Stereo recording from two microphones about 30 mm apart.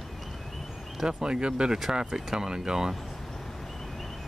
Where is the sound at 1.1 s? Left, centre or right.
Right.